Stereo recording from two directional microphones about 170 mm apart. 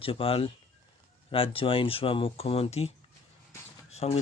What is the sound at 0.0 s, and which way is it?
Speech, 35° left (ahead or behind).